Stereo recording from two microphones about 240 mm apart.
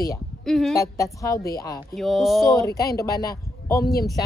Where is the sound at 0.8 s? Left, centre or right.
Centre.